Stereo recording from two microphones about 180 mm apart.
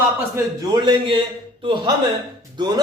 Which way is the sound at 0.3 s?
20° right (ahead or behind).